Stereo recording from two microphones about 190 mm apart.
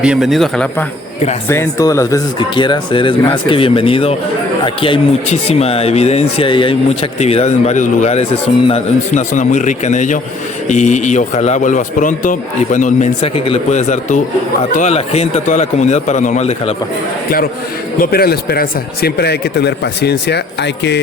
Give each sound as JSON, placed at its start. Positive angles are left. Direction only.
{"t": 0.0, "sound": "a man's voice", "side_deg": -5}
{"t": 1.5, "sound": "speech", "side_deg": 15}
{"t": 18.0, "sound": "a man's voice", "side_deg": 55}